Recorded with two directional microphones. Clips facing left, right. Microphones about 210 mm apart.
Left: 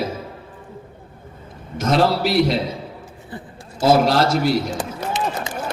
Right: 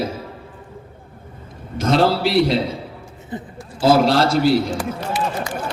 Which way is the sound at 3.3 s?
20° right (ahead or behind).